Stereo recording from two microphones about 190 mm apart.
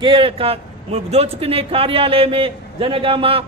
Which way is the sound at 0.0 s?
30° right (ahead or behind).